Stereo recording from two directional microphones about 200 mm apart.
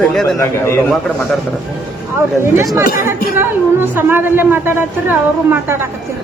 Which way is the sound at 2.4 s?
10° right (ahead or behind).